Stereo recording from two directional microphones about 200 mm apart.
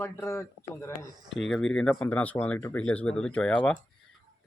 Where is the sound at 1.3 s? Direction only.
Centre (ahead or behind).